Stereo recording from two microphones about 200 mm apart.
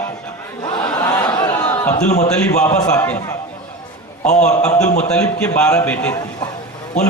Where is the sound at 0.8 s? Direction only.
15° left (ahead or behind).